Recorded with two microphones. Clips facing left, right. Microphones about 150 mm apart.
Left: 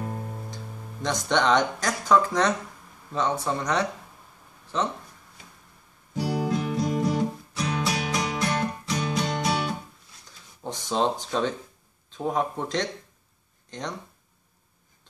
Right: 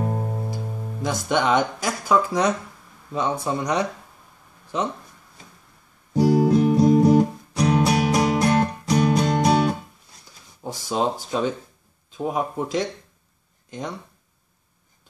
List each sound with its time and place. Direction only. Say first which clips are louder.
0.0 s music: right 7 dB; 45° right (ahead or behind)
1.0 s speech: right 1 dB; 10° right (ahead or behind)
6.1 s music: right 9 dB; 40° right (ahead or behind)
7.9 s music: right 8 dB; 50° right (ahead or behind)
10.6 s speech: right 2 dB; 10° right (ahead or behind)